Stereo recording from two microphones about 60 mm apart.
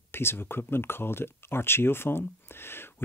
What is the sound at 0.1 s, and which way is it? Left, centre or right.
Speech, left.